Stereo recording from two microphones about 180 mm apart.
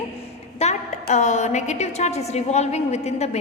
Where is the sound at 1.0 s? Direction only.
40° left (ahead or behind).